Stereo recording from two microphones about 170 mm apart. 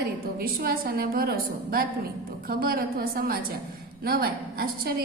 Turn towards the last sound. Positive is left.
turn(degrees=-60)  # may be behind; listen again after turning